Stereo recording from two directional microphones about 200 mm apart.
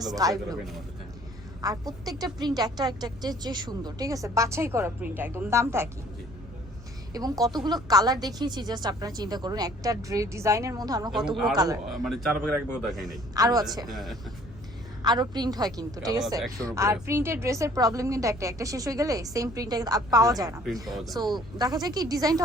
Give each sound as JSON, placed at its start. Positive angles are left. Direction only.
{"t": 0.0, "sound": "a woman's voice", "side_deg": -20}
{"t": 1.6, "sound": "a woman's voice", "side_deg": -20}
{"t": 7.1, "sound": "a woman's voice", "side_deg": -20}
{"t": 11.9, "sound": "a man's voice", "side_deg": 0}
{"t": 13.3, "sound": "speech", "side_deg": -20}
{"t": 13.9, "sound": "a man's voice", "side_deg": 0}
{"t": 15.0, "sound": "a woman's voice", "side_deg": -20}
{"t": 20.8, "sound": "a man's voice", "side_deg": 0}
{"t": 21.2, "sound": "speech", "side_deg": -20}